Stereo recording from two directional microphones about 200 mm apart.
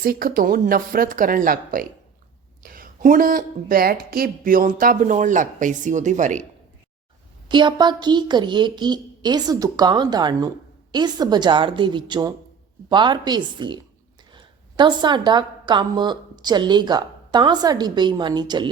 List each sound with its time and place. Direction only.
0.0 s speech: 45° right (ahead or behind)
7.4 s a woman's voice: 20° right (ahead or behind)